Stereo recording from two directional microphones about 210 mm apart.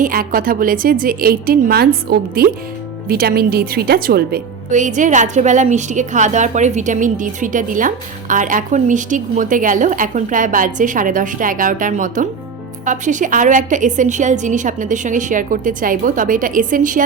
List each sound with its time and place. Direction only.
0.0 s a woman's voice: 40° right (ahead or behind)